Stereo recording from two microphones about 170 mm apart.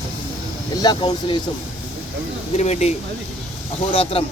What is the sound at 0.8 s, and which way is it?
Speech, 25° left (ahead or behind).